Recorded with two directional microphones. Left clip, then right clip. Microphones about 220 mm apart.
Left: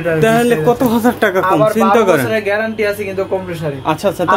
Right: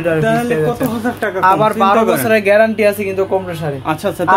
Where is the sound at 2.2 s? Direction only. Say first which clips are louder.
Right 5 dB; 45° right (ahead or behind).